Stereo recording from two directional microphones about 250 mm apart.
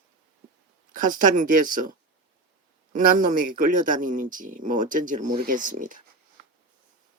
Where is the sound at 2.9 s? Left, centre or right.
Right.